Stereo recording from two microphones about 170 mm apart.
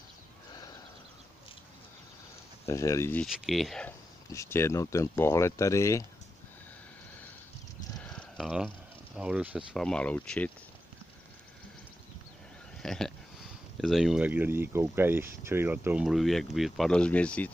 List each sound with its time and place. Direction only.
2.6 s speech: 20° left (ahead or behind)
3.3 s speech: centre (ahead or behind)
4.3 s speech: 15° left (ahead or behind)
8.0 s a sound: 5° left (ahead or behind)
9.8 s speech: 5° left (ahead or behind)
12.8 s speech: 5° left (ahead or behind)